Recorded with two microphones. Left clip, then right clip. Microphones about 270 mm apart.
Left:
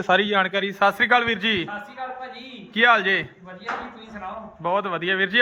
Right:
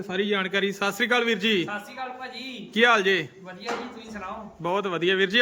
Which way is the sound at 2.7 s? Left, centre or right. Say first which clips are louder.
Left 2 dB; centre.